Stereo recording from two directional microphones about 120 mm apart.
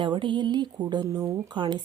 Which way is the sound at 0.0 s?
40° right (ahead or behind).